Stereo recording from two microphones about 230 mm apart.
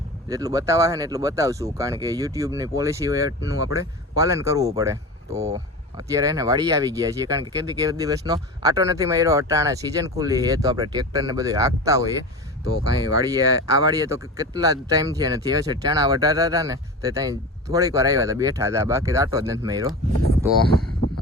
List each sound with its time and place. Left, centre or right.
0.3 s speech: centre